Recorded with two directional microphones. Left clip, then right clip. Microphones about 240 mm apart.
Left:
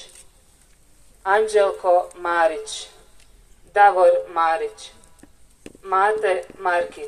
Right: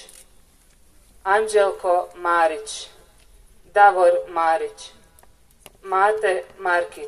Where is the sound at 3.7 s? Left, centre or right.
Centre.